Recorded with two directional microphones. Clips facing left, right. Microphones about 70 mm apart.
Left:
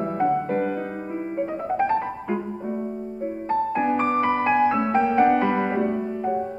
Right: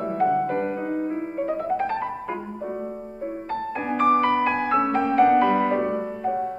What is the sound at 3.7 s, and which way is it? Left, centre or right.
Music, centre.